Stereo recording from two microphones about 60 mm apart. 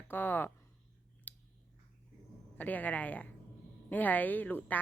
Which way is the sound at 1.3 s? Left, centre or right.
Left.